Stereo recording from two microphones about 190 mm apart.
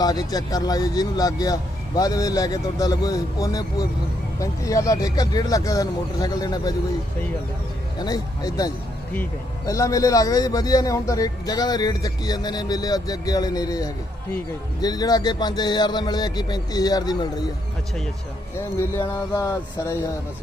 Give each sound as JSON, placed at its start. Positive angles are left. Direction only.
{"t": 0.0, "sound": "speech", "side_deg": 20}
{"t": 7.9, "sound": "speech", "side_deg": 20}
{"t": 18.5, "sound": "speech", "side_deg": 15}